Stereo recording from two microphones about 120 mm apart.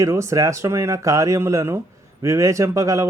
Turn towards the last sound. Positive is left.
turn(degrees=-25)  # may be behind; listen again after turning